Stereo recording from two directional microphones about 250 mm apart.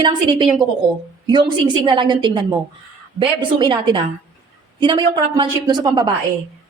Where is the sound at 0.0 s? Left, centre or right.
Centre.